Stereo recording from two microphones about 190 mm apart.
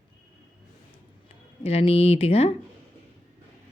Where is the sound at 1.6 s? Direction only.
30° left (ahead or behind).